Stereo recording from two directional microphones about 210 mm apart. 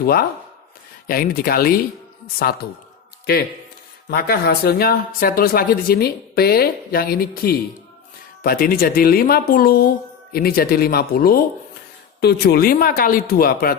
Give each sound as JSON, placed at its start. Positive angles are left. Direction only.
{"t": 0.0, "sound": "speech", "side_deg": 45}
{"t": 4.1, "sound": "speech", "side_deg": 45}